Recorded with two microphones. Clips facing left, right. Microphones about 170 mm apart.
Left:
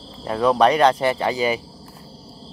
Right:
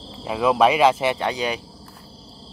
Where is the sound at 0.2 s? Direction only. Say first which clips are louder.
Left 1 dB; 5° right (ahead or behind).